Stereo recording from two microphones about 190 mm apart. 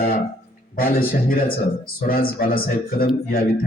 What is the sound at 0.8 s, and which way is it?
Speech, 50° left (ahead or behind).